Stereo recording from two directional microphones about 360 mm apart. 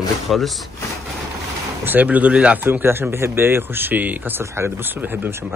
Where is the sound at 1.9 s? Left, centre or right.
Centre.